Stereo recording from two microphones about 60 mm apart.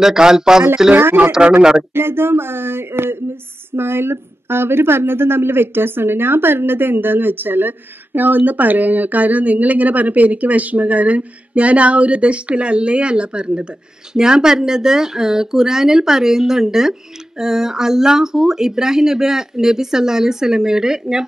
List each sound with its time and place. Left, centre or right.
0.0 s speech: centre
0.9 s speech: right
1.6 s speech: centre
2.0 s speech: right; by 21.2 s centre